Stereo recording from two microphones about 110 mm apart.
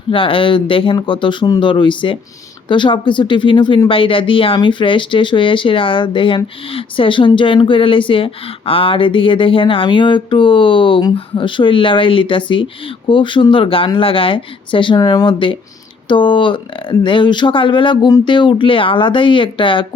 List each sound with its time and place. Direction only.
0.1 s speech: 50° left (ahead or behind)